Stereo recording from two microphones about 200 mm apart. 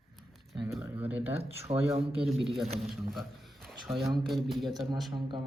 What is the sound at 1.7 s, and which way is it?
Speech, 30° right (ahead or behind).